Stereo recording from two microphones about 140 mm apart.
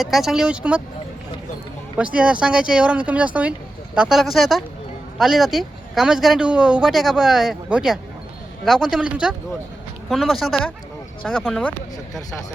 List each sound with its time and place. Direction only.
0.0 s speech: centre (ahead or behind)
2.0 s speech: 10° right (ahead or behind)
11.2 s speech: 10° left (ahead or behind)